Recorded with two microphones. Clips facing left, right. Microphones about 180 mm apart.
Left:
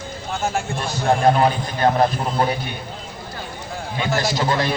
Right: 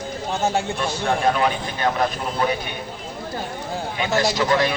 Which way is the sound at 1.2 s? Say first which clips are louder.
Left 4 dB; 35° left (ahead or behind).